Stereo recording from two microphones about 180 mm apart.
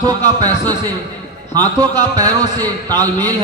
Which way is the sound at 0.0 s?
25° right (ahead or behind).